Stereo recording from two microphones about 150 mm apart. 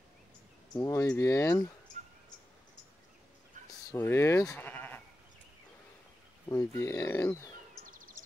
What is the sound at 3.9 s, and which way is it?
Speech, 15° left (ahead or behind).